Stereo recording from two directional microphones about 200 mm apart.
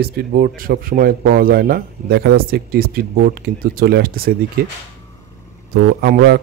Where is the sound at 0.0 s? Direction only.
50° right (ahead or behind).